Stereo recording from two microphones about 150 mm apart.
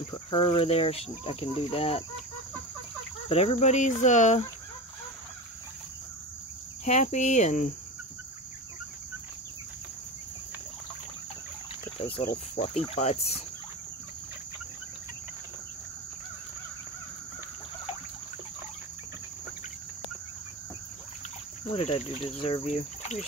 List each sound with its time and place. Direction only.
0.1 s speech: 35° left (ahead or behind)
3.3 s speech: 40° left (ahead or behind)
6.8 s speech: 50° left (ahead or behind)
12.0 s speech: 40° left (ahead or behind)
21.7 s speech: 40° left (ahead or behind)